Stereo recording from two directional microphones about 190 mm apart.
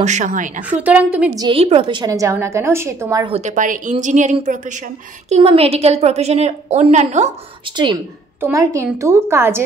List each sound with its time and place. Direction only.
0.0 s a woman's voice: 40° right (ahead or behind)
0.7 s a woman's voice: 5° right (ahead or behind)
1.3 s a woman's voice: 25° right (ahead or behind)
3.3 s a woman's voice: 35° right (ahead or behind)
7.7 s a woman's voice: 25° right (ahead or behind)